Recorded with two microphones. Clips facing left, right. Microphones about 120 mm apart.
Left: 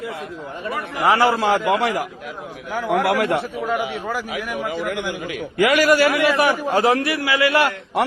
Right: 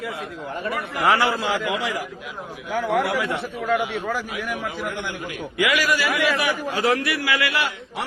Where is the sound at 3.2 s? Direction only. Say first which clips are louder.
Left 6 dB; 55° left (ahead or behind).